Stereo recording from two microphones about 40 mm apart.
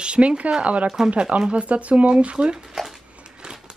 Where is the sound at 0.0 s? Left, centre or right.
Right.